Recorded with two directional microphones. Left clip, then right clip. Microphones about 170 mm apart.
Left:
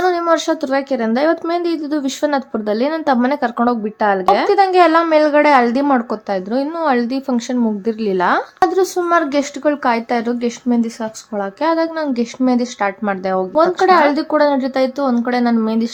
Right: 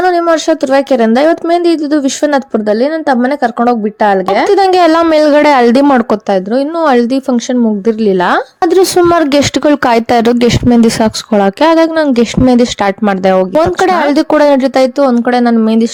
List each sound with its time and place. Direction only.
0.0 s speech: 40° right (ahead or behind)